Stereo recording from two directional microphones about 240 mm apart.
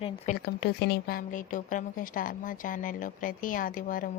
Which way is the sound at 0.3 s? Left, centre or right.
Left.